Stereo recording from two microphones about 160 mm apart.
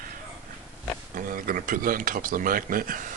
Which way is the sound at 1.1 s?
60° right (ahead or behind).